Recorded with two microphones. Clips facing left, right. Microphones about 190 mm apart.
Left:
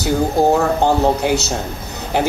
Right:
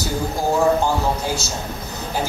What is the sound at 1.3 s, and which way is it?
Speech, 65° left (ahead or behind).